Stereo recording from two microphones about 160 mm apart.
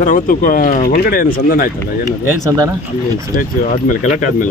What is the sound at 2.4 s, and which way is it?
Speech, 20° right (ahead or behind).